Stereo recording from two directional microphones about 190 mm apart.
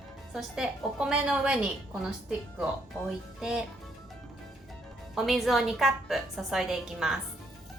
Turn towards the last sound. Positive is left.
turn(degrees=0)  # may be behind; listen again after turning